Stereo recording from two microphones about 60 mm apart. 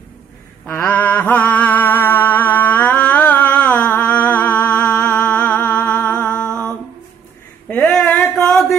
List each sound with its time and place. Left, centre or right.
0.7 s music: left
4.8 s music: centre
7.6 s a sound: centre